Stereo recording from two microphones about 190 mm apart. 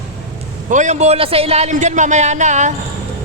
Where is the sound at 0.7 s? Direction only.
40° right (ahead or behind).